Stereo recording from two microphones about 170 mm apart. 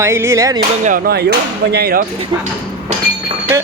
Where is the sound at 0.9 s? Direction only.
55° right (ahead or behind).